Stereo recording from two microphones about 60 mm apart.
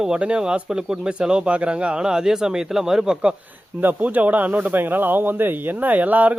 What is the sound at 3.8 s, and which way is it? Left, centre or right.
Speech, right.